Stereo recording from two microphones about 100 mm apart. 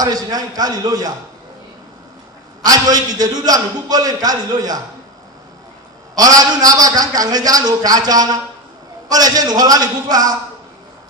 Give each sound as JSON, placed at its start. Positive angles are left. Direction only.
{"t": 0.0, "sound": "a man's voice", "side_deg": -40}
{"t": 2.6, "sound": "a man's voice", "side_deg": -40}
{"t": 6.1, "sound": "a man's voice", "side_deg": -40}